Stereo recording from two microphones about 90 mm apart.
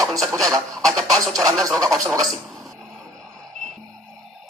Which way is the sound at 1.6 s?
5° left (ahead or behind).